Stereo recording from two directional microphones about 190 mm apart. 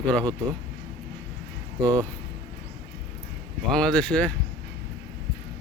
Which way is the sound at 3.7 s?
5° left (ahead or behind).